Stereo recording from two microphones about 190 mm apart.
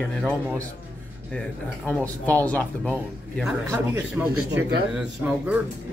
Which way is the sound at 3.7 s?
15° right (ahead or behind).